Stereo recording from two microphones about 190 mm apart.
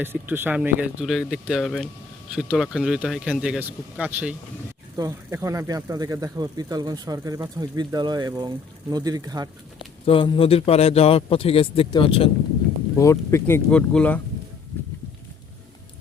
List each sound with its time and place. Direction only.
0.0 s speech: 10° right (ahead or behind)
9.7 s speech: 25° left (ahead or behind)
13.0 s speech: 15° left (ahead or behind)